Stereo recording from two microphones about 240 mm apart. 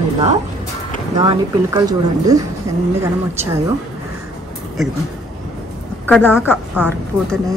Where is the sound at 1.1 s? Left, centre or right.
Centre.